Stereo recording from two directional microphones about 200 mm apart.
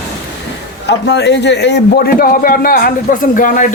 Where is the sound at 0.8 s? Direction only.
60° left (ahead or behind).